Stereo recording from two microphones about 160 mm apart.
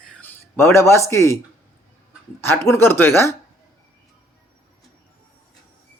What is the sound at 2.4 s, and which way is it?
Speech, 15° left (ahead or behind).